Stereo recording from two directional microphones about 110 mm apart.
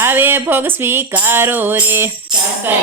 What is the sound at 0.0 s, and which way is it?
Speech, 20° right (ahead or behind).